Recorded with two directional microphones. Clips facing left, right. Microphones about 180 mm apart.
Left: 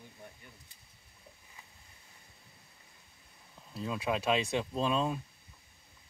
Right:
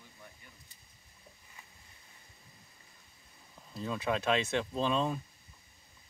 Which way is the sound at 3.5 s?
5° left (ahead or behind).